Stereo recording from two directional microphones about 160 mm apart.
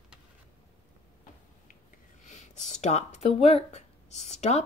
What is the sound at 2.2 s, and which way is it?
Speech, 45° left (ahead or behind).